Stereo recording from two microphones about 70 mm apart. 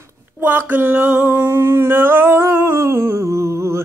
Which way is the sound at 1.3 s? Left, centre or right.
Right.